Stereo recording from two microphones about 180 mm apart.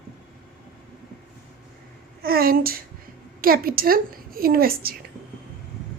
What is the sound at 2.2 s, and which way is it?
A woman's voice, 55° right (ahead or behind).